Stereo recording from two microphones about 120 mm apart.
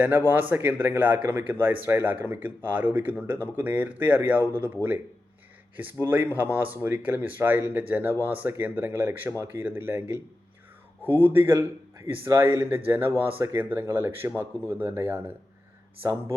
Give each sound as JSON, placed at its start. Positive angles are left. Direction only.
{"t": 0.0, "sound": "speech", "side_deg": -15}
{"t": 6.0, "sound": "speech", "side_deg": -15}
{"t": 11.2, "sound": "speech", "side_deg": -15}